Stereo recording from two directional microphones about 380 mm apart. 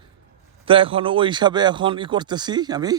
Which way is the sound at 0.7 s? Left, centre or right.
Centre.